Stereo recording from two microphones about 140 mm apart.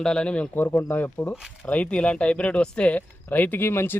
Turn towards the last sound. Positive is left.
turn(degrees=15)  # may be behind; listen again after turning